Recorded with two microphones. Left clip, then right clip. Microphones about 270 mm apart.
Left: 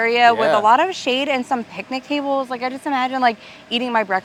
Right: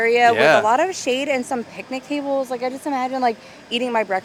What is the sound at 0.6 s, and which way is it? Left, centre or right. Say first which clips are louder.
Speech: left 3 dB; centre.